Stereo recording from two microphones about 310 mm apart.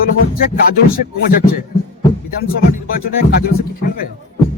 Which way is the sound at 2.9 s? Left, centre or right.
Left.